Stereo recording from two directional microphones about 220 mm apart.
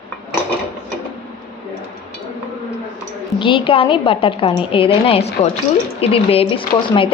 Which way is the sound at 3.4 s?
25° left (ahead or behind).